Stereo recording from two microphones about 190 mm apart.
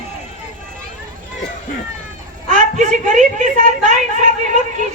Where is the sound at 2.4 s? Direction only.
40° right (ahead or behind).